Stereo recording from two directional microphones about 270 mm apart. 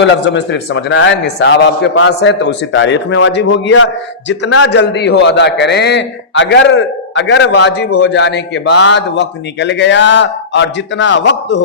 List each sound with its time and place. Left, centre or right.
0.0 s a man's voice: left